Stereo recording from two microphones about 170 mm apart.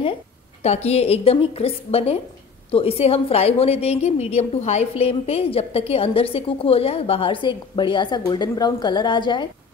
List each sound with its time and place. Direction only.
0.8 s a woman's voice: 35° left (ahead or behind)